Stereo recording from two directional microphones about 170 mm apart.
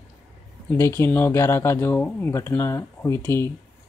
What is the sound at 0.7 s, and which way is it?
Speech, 15° left (ahead or behind).